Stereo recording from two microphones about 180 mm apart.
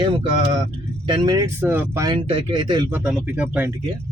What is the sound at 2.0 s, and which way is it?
Speech, 30° right (ahead or behind).